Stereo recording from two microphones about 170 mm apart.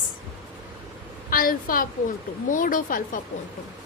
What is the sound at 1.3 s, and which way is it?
A woman's voice, 55° left (ahead or behind).